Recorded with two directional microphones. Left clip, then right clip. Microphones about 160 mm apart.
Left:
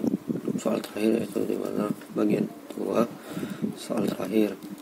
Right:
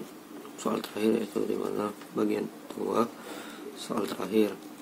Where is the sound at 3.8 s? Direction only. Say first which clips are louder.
Left 2 dB; 20° left (ahead or behind).